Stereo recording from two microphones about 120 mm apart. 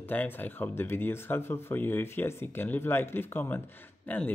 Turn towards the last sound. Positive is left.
turn(degrees=15)  # may be behind; listen again after turning